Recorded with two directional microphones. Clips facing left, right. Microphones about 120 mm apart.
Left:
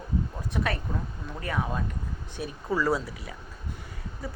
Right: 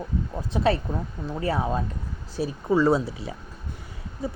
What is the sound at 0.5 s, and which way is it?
Speech, 30° right (ahead or behind).